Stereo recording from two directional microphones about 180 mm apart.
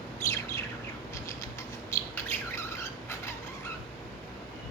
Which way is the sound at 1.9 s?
15° left (ahead or behind).